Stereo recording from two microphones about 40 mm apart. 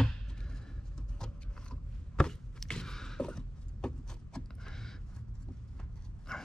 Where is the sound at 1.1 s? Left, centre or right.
Centre.